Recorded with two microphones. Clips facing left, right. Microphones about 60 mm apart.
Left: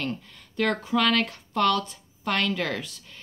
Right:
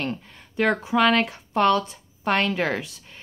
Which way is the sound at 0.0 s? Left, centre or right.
Right.